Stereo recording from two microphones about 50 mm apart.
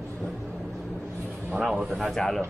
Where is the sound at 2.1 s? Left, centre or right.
Centre.